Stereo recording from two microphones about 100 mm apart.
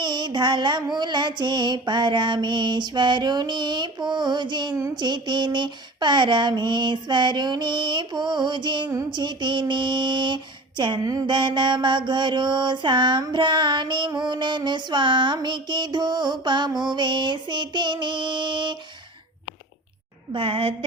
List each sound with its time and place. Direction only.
0.0 s mantra: 50° right (ahead or behind)
20.3 s a woman's voice: 60° right (ahead or behind)